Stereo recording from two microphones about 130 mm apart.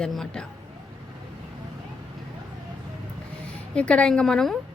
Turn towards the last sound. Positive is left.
turn(degrees=5)  # may be behind; listen again after turning